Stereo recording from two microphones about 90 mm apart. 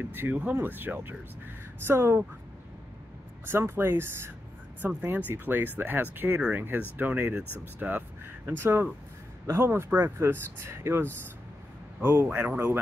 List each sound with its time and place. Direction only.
0.0 s speech: 20° right (ahead or behind)
3.4 s speech: 25° right (ahead or behind)